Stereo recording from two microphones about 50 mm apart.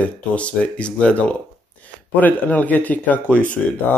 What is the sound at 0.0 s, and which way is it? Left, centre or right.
Speech, left.